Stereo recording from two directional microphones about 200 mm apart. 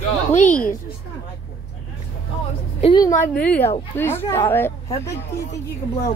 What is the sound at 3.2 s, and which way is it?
A woman's voice, 10° left (ahead or behind).